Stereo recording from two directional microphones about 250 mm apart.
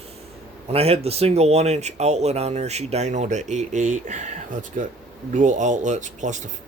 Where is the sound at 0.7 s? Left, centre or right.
Right.